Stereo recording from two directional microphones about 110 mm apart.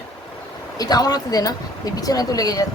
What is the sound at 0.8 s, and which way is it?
Speech, 35° left (ahead or behind).